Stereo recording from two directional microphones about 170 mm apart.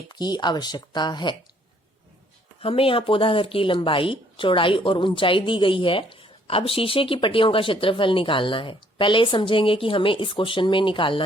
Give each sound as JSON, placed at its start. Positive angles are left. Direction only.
{"t": 0.1, "sound": "speech", "side_deg": 25}
{"t": 2.6, "sound": "speech", "side_deg": 35}